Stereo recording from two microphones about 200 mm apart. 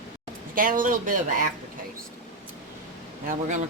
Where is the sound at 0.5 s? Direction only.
45° right (ahead or behind).